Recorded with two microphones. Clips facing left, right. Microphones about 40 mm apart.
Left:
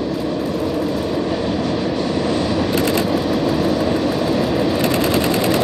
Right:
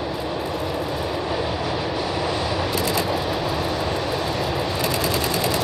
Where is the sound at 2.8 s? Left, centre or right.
Left.